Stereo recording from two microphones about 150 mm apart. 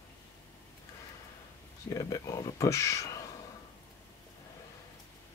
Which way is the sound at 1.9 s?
20° left (ahead or behind).